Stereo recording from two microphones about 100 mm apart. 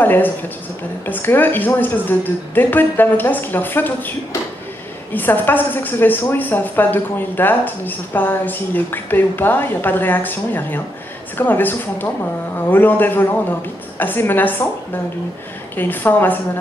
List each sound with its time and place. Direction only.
0.0 s a woman's voice: 20° left (ahead or behind)
15.7 s a woman's voice: 20° left (ahead or behind)